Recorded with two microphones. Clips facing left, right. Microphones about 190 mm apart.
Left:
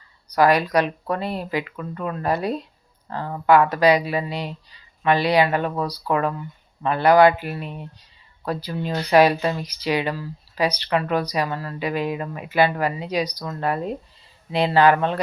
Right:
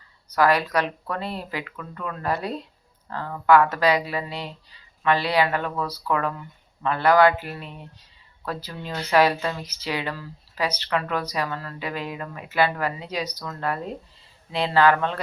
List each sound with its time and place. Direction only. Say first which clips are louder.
0.3 s speech: left 3 dB; 15° left (ahead or behind)